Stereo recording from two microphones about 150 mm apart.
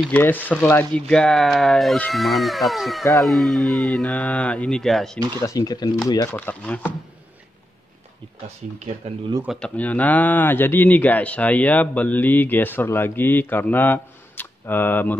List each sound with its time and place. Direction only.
0.1 s speech: 10° left (ahead or behind)
5.4 s speech: 25° left (ahead or behind)
6.3 s speech: 10° left (ahead or behind)
9.0 s speech: 45° right (ahead or behind)
9.6 s speech: 10° left (ahead or behind)